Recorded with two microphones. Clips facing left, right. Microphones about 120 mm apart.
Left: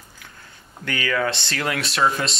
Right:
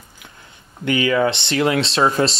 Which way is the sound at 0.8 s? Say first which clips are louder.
Right 6 dB; 20° right (ahead or behind).